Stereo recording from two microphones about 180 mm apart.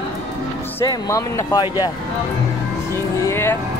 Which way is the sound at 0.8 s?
20° left (ahead or behind).